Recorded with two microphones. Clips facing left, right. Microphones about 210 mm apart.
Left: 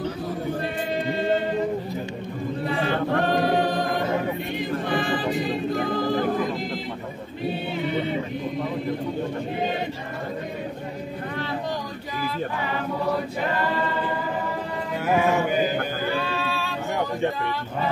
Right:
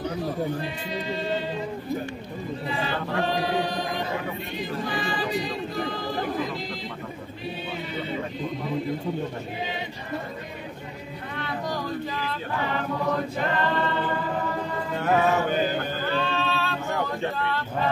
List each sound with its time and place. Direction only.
0.8 s choir: 55° left (ahead or behind)
2.7 s a capella: 55° left (ahead or behind)
4.6 s music: 55° left (ahead or behind)
13.0 s choir: 10° left (ahead or behind)
15.0 s a sound: 10° left (ahead or behind)